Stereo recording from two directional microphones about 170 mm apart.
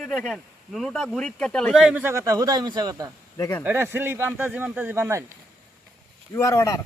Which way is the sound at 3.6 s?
15° right (ahead or behind).